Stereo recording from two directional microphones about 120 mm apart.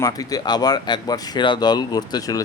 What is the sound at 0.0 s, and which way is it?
Speech, 30° left (ahead or behind).